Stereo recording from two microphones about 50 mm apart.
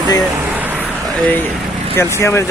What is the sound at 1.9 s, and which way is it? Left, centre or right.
Speech, left.